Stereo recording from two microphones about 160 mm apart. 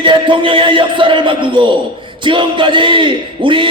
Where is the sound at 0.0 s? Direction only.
30° right (ahead or behind).